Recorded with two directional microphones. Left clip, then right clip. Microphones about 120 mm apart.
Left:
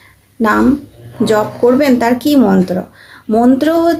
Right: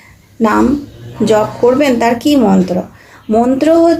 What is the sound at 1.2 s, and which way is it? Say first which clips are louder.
A woman's voice: right 1 dB; 20° left (ahead or behind).